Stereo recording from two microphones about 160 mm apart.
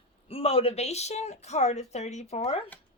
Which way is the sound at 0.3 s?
35° left (ahead or behind).